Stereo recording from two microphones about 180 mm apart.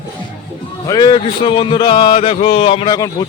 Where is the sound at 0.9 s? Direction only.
25° left (ahead or behind).